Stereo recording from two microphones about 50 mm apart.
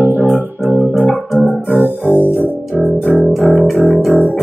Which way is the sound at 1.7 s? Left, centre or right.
Left.